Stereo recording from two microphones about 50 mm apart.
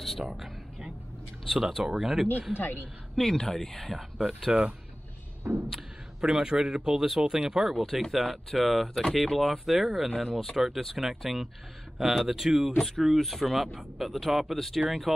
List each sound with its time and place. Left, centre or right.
0.2 s a sound: centre
1.5 s speech: centre
3.2 s speech: centre
4.5 s speech: centre
5.4 s a sound: right
6.2 s speech: centre